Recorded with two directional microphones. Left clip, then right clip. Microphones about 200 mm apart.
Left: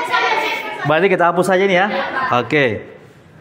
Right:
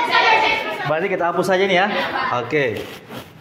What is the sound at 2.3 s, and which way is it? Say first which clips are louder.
Speech: left 4 dB; 55° left (ahead or behind).